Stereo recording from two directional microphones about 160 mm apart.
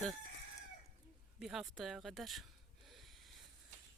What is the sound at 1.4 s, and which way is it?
Speech, centre (ahead or behind).